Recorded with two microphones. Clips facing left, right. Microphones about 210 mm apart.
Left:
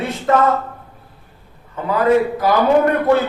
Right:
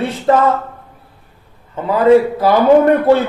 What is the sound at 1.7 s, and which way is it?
A man's voice, 30° right (ahead or behind).